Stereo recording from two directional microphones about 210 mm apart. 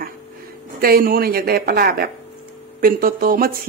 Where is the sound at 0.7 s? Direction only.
45° right (ahead or behind).